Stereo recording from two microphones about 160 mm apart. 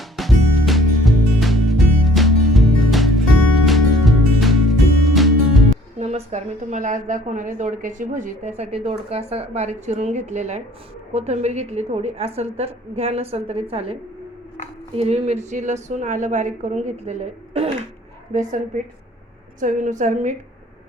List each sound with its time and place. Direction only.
0.0 s music: centre (ahead or behind)
6.0 s a woman's voice: 45° right (ahead or behind)
14.9 s a woman's voice: 40° right (ahead or behind)